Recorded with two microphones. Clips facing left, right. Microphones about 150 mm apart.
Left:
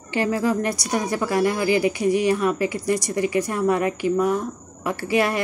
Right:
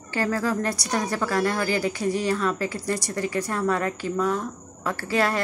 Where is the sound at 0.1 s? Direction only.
15° left (ahead or behind).